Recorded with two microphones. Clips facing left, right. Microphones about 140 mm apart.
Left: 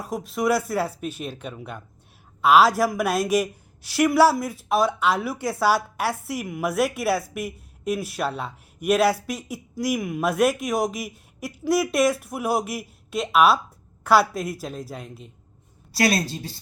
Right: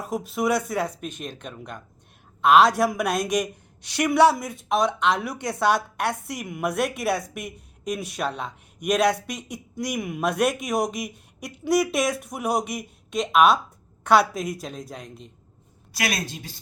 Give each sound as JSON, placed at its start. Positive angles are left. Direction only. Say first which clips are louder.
{"t": 0.0, "sound": "a woman's voice", "louder": "even", "side_deg": 0}
{"t": 15.9, "sound": "a woman's voice", "louder": "left 6 dB", "side_deg": 30}